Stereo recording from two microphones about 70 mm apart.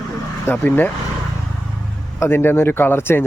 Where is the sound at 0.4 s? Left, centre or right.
Left.